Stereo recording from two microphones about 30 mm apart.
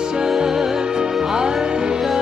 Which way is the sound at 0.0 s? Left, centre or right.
Right.